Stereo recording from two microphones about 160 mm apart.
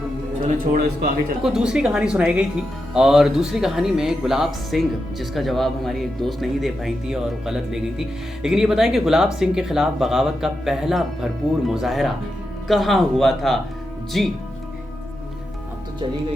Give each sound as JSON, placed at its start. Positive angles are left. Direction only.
{"t": 0.4, "sound": "speech", "side_deg": -45}
{"t": 1.4, "sound": "speech", "side_deg": -5}